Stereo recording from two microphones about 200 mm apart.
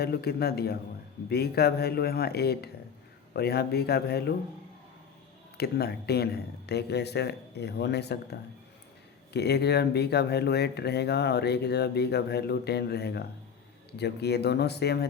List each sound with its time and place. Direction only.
0.0 s speech: 50° left (ahead or behind)
5.5 s speech: 50° left (ahead or behind)